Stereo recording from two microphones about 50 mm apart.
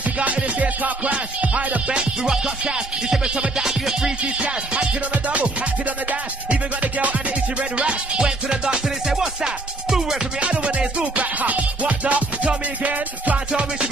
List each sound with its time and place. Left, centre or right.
0.2 s music: right
3.6 s music: centre
4.2 s music: right
6.5 s music: right; by 10.1 s centre
10.4 s music: right
13.5 s music: centre